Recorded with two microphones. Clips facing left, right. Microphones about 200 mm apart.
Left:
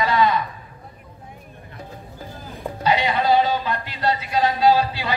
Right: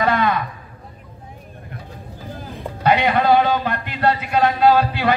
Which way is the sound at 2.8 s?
60° right (ahead or behind).